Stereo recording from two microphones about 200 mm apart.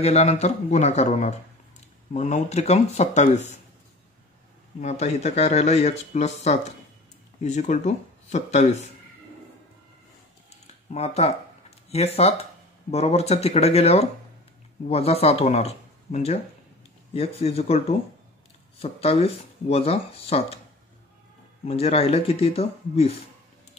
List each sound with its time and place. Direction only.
0.0 s speech: 30° left (ahead or behind)
4.7 s speech: 35° left (ahead or behind)
10.9 s speech: 35° left (ahead or behind)
21.6 s speech: 30° left (ahead or behind)